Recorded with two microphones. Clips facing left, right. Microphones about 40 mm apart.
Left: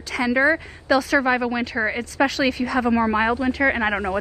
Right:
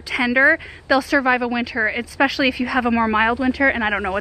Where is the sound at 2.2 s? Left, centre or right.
Right.